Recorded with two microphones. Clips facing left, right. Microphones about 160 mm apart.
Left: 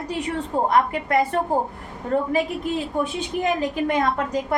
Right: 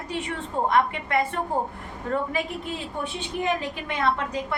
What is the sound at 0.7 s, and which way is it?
Speech, 40° left (ahead or behind).